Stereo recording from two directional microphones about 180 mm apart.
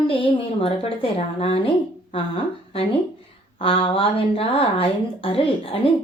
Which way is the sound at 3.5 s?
30° left (ahead or behind).